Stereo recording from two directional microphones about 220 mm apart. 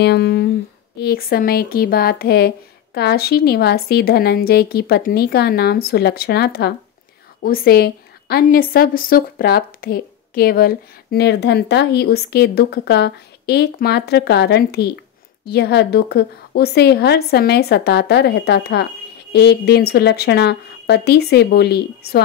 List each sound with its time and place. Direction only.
0.0 s a woman's voice: 45° left (ahead or behind)